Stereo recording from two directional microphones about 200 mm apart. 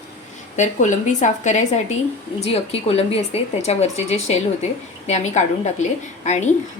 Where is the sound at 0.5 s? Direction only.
35° left (ahead or behind).